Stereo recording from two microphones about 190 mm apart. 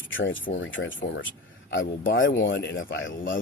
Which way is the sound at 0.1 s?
80° left.